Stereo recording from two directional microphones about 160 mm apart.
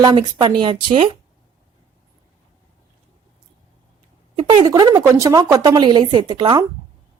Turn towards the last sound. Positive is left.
turn(degrees=-30)  # may be behind; listen again after turning